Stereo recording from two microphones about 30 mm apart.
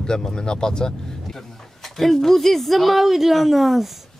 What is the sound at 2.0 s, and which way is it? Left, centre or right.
Speech, centre.